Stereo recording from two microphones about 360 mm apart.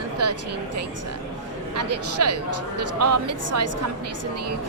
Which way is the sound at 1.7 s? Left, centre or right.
Right.